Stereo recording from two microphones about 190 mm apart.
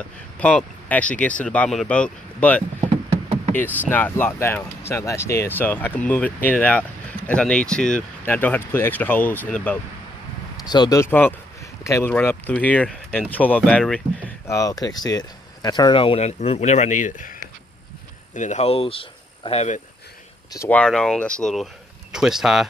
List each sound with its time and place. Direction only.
0.4 s speech: 5° left (ahead or behind)
3.9 s speech: 10° left (ahead or behind)
10.7 s speech: 20° left (ahead or behind)
14.4 s speech: 15° left (ahead or behind); by 19.8 s 35° left (ahead or behind)
20.5 s speech: 10° left (ahead or behind)